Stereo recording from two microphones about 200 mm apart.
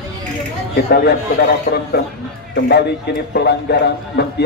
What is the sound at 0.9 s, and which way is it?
A man's voice, 50° left (ahead or behind).